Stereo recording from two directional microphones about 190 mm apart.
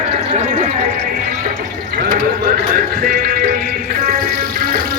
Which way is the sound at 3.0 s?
50° right (ahead or behind).